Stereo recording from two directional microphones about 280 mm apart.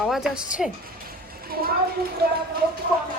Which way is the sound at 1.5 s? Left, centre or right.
Right.